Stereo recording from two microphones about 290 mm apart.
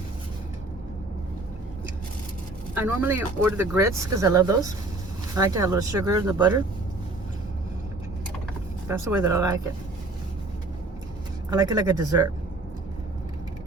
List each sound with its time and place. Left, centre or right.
2.7 s speech: centre
9.3 s speech: centre
11.5 s speech: centre